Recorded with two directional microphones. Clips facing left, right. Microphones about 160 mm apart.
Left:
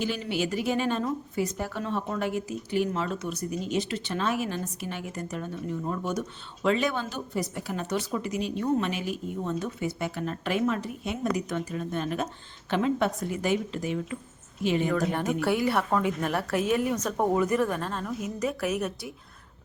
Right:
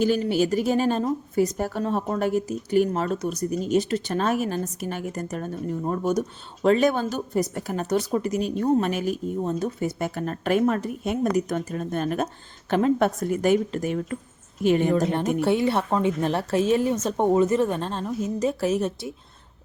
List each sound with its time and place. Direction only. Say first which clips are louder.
0.0 s speech: right 8 dB; 40° right (ahead or behind)
14.8 s a woman's voice: right 4 dB; 25° right (ahead or behind)